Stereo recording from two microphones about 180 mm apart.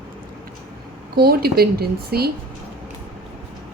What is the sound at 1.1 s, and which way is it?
Speech, 60° right (ahead or behind).